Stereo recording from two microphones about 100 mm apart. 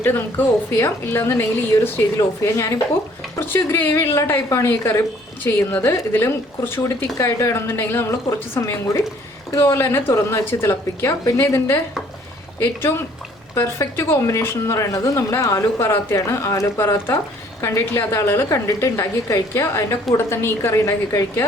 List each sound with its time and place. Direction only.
0.0 s a woman's voice: 20° left (ahead or behind)
13.6 s a woman's voice: 25° left (ahead or behind)